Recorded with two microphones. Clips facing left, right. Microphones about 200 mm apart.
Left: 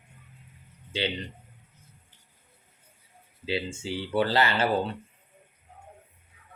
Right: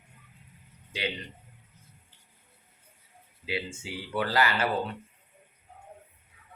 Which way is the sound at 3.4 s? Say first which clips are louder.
Left 4 dB; 30° left (ahead or behind).